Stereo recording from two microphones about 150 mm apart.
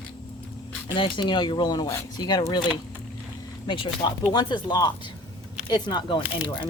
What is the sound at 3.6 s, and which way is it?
Speech, 35° left (ahead or behind).